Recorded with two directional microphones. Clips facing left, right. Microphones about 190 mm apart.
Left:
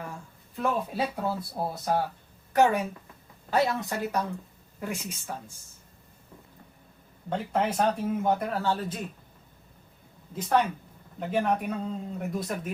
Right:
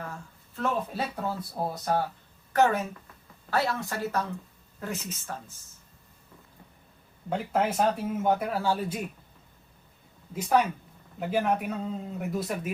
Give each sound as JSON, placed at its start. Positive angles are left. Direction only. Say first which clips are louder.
{"t": 0.0, "sound": "speech", "louder": "even", "side_deg": 15}
{"t": 7.3, "sound": "a man's voice", "louder": "right 1 dB", "side_deg": -5}
{"t": 10.3, "sound": "a man's voice", "louder": "right 1 dB", "side_deg": -10}